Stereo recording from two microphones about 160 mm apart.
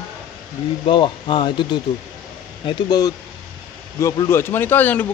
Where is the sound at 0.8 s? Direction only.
30° left (ahead or behind).